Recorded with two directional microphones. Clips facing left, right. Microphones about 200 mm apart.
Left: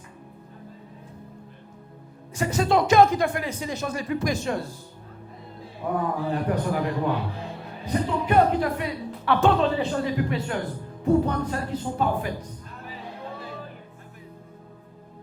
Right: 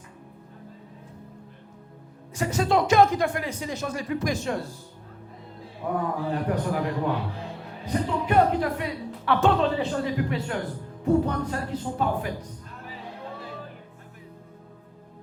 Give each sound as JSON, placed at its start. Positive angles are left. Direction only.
{"t": 2.4, "sound": "a man's voice", "side_deg": 5}
{"t": 5.8, "sound": "a man's voice", "side_deg": 20}
{"t": 11.0, "sound": "a man's voice", "side_deg": 25}
{"t": 11.9, "sound": "music", "side_deg": 15}